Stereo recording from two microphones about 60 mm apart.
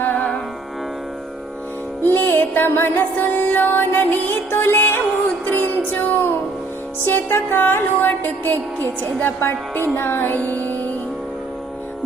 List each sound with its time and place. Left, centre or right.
0.0 s music: left
2.0 s music: left